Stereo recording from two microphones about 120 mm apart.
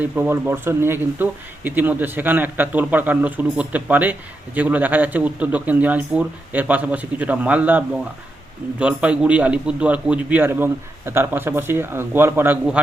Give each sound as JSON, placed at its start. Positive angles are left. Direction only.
{"t": 0.0, "sound": "speech", "side_deg": -20}